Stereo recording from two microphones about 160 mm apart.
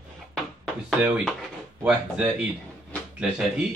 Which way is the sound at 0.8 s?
Centre (ahead or behind).